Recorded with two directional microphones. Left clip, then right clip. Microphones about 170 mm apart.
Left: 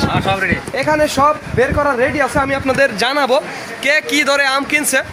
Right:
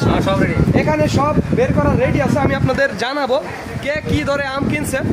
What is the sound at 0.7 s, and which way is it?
Speech, 20° left (ahead or behind).